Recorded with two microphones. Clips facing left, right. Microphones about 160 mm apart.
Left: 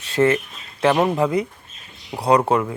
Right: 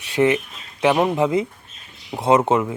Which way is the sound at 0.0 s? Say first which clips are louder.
Even; 15° right (ahead or behind).